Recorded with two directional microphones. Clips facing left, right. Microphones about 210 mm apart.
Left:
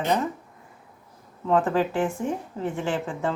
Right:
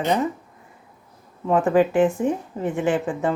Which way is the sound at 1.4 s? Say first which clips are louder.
Right 4 dB; 15° right (ahead or behind).